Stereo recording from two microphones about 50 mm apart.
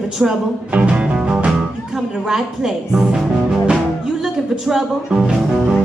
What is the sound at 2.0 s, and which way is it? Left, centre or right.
Speech, centre.